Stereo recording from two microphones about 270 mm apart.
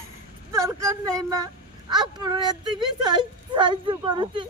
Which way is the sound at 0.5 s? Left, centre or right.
Centre.